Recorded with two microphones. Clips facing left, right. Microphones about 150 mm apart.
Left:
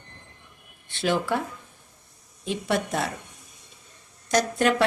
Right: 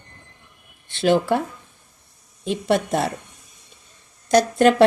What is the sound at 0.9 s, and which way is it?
Speech, 30° right (ahead or behind).